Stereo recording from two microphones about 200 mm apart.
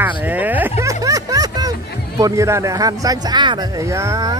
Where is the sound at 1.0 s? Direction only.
15° right (ahead or behind).